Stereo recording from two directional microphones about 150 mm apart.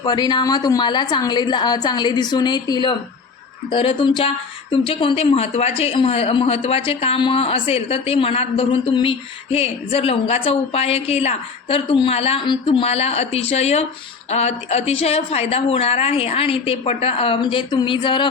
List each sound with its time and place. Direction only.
0.0 s a woman's voice: 30° left (ahead or behind)